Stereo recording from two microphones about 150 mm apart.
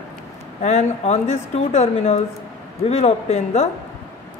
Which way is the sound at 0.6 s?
50° left (ahead or behind).